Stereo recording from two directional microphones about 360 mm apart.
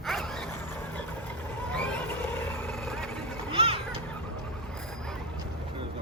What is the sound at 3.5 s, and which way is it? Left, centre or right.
Children playing, centre.